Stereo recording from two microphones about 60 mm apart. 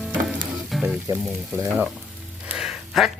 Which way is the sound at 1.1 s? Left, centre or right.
Right.